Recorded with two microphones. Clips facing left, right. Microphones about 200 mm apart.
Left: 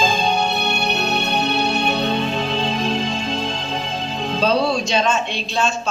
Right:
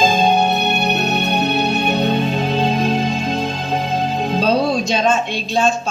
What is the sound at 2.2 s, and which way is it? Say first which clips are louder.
Music: right 4 dB; 45° right (ahead or behind).